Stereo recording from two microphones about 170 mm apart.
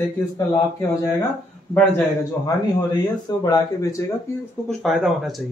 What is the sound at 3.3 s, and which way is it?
Speech, 25° left (ahead or behind).